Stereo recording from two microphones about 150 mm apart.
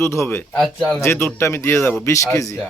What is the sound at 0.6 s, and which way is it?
Speech, centre (ahead or behind).